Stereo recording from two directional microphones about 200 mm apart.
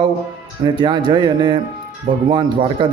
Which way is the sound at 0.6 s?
25° right (ahead or behind).